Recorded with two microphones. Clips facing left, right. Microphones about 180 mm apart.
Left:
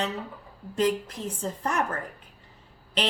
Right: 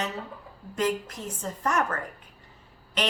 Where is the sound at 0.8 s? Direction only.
30° left (ahead or behind).